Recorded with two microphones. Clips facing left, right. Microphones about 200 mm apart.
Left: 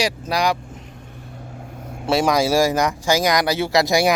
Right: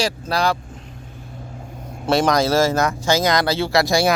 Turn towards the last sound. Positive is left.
turn(degrees=20)  # may be behind; listen again after turning